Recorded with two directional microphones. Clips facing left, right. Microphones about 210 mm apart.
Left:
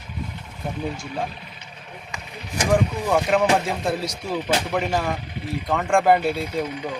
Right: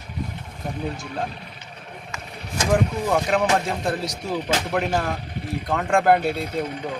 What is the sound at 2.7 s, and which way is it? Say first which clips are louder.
Speech: left 1 dB; centre (ahead or behind).